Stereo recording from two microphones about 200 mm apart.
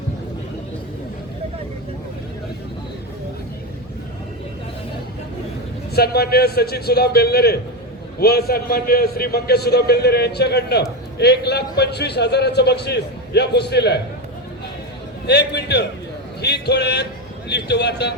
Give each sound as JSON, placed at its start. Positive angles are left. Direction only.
{"t": 5.9, "sound": "a man's voice", "side_deg": 50}
{"t": 15.3, "sound": "a man's voice", "side_deg": 55}